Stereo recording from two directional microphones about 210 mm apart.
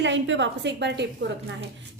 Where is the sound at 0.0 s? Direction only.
60° right (ahead or behind).